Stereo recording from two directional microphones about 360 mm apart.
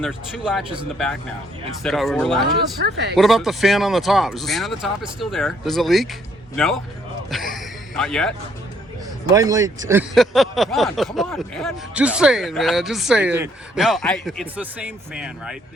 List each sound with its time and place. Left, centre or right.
0.0 s speech: centre
1.8 s speech: centre
2.8 s speech: right
3.2 s speech: centre
7.3 s a sound: centre
9.3 s speech: centre